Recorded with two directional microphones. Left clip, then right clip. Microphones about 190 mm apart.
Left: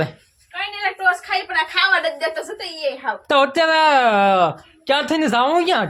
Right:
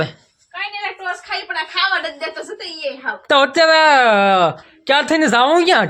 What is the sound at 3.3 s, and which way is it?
Speech, 15° right (ahead or behind).